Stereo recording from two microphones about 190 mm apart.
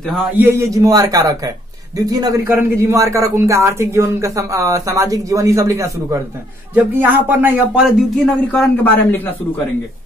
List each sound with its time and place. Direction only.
0.0 s speech: centre (ahead or behind)
0.4 s a man's voice: 15° right (ahead or behind)
8.5 s speech: 5° left (ahead or behind)